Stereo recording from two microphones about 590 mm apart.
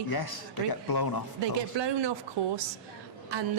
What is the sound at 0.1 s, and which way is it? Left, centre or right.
Speech, left.